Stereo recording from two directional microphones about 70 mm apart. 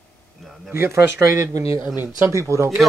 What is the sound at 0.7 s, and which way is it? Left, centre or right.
Speech, right.